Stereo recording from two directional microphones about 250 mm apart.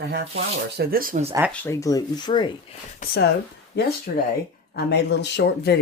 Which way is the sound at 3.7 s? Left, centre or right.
Left.